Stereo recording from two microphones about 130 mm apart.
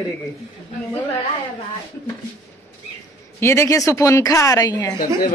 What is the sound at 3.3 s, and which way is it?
A woman's voice, 20° left (ahead or behind).